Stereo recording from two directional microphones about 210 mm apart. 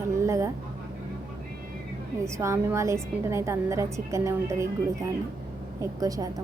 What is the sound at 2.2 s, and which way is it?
A woman's voice, 15° right (ahead or behind).